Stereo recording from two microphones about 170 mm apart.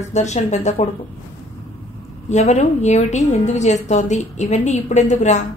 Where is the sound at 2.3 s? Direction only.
45° left (ahead or behind).